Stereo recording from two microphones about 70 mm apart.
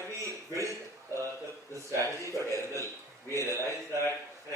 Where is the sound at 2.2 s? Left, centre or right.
Right.